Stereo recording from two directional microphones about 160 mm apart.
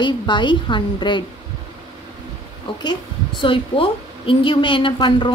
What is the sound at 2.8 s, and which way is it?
A woman's voice, 30° left (ahead or behind).